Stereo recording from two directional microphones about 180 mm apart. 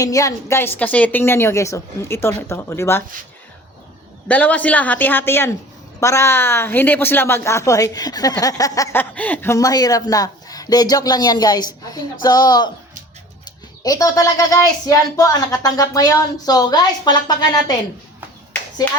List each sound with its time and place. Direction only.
0.0 s a woman's voice: 20° left (ahead or behind)
4.3 s a woman's voice: 10° left (ahead or behind)